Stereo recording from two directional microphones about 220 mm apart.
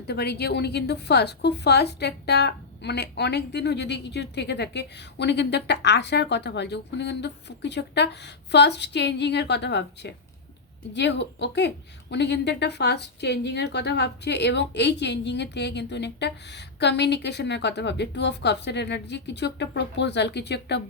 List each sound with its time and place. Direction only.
0.1 s a woman's voice: 45° left (ahead or behind)